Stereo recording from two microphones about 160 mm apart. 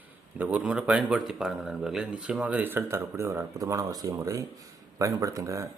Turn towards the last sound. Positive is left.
turn(degrees=-20)  # may be behind; listen again after turning